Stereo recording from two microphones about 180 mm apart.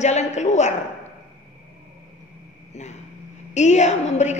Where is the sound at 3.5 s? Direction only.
40° left (ahead or behind).